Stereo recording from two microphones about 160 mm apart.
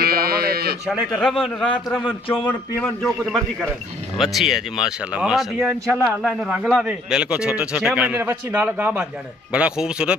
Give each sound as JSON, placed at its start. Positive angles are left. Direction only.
{"t": 0.0, "sound": "sheep", "side_deg": -70}
{"t": 0.8, "sound": "a man's voice", "side_deg": -5}
{"t": 2.3, "sound": "a man's voice", "side_deg": 10}